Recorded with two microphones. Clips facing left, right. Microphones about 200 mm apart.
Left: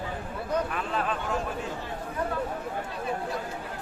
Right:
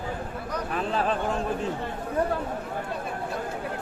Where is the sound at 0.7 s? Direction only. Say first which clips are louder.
Right 4 dB; 35° right (ahead or behind).